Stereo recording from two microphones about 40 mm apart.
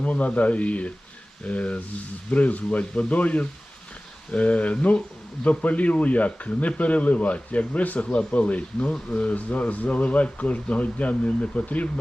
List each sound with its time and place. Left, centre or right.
0.0 s speech: left